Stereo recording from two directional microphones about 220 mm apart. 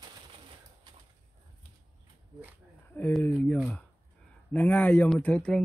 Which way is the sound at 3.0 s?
10° left (ahead or behind).